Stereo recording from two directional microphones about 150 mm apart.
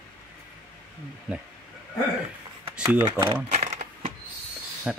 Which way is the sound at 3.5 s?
45° right (ahead or behind).